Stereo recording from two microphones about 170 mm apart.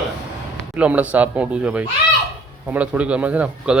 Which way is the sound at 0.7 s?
10° right (ahead or behind).